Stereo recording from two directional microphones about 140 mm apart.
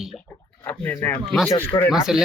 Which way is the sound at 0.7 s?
15° left (ahead or behind).